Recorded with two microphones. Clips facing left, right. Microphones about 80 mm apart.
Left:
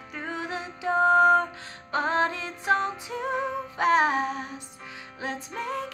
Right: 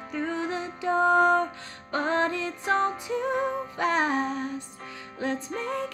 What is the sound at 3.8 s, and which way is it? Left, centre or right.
Music, centre.